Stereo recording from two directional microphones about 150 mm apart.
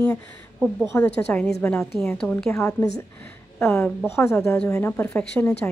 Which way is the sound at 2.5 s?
15° left (ahead or behind).